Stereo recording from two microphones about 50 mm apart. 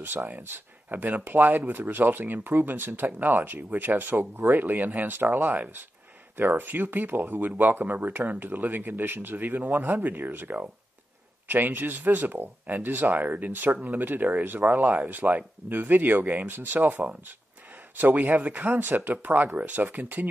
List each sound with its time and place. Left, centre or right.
0.0 s speech: right
0.8 s speech: right
16.8 s speech: right